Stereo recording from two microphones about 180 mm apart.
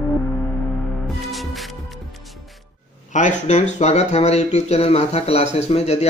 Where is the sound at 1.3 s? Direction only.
Centre (ahead or behind).